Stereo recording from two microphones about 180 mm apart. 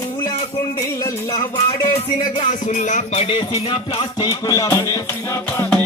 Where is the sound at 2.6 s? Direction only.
40° left (ahead or behind); by 5.8 s 15° left (ahead or behind).